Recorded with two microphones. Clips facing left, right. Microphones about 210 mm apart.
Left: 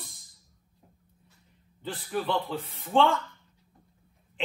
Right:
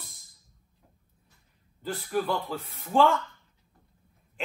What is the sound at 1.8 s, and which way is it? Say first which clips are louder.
Speech: right 3 dB; centre (ahead or behind).